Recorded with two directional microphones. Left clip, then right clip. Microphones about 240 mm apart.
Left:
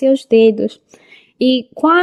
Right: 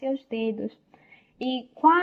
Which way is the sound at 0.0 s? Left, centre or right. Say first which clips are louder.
Left 19 dB; left.